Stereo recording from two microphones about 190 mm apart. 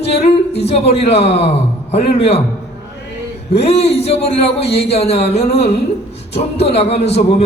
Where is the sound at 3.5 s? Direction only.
30° left (ahead or behind).